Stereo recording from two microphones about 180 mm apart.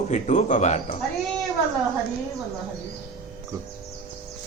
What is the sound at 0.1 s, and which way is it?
Mantra, 40° left (ahead or behind).